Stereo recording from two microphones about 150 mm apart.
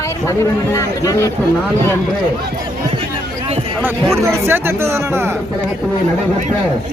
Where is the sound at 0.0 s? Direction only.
20° left (ahead or behind).